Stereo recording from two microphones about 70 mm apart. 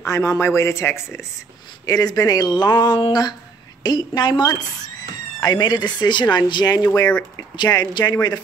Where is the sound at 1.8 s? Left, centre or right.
Left.